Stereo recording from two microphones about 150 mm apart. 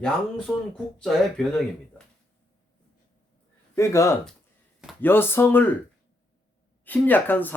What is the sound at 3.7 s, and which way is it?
Speech, 20° left (ahead or behind).